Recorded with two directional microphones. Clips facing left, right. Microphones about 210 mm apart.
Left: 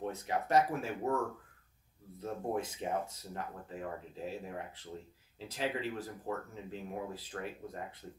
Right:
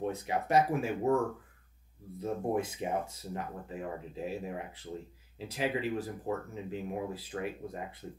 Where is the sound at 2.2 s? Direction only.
10° right (ahead or behind).